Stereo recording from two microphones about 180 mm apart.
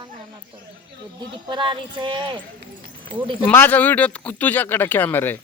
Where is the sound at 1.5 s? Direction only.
25° right (ahead or behind).